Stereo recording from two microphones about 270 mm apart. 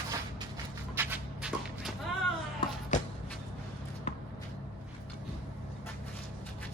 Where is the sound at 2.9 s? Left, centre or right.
Left.